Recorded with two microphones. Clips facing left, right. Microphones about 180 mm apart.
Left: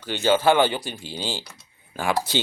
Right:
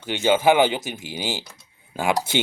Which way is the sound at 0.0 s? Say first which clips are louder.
Right 1 dB; 15° right (ahead or behind).